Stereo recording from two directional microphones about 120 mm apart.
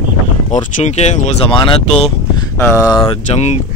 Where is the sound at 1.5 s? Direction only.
45° left (ahead or behind).